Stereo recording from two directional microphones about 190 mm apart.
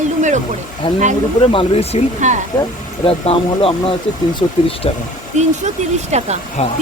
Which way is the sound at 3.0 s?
30° left (ahead or behind).